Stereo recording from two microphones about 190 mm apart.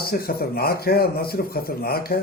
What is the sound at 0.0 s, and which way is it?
Speech, 55° left (ahead or behind).